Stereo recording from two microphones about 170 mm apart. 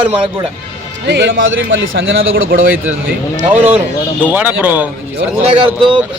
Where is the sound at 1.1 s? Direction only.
85° right.